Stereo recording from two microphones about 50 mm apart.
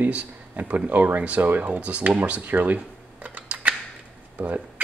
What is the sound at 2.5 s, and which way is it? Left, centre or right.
Camera, right.